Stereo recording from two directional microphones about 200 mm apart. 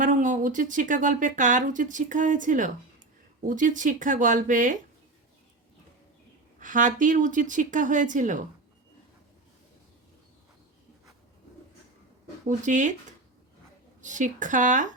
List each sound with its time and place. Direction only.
0.0 s speech: 40° right (ahead or behind)
6.6 s speech: 40° right (ahead or behind)
12.5 s speech: 40° right (ahead or behind)
14.0 s speech: 40° right (ahead or behind)